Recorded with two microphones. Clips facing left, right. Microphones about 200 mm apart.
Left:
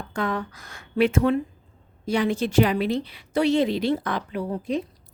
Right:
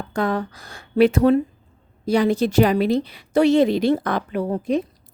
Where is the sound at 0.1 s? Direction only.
35° right (ahead or behind).